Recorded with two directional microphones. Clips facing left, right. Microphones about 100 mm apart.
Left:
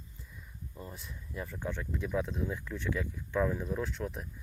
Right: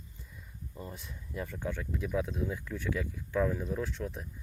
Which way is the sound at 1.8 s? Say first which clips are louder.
Even; 40° left (ahead or behind).